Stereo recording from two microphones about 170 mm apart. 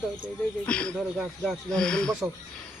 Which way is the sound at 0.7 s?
5° left (ahead or behind).